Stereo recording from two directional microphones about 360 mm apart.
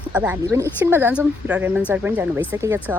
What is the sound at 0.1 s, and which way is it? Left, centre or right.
Speech, centre.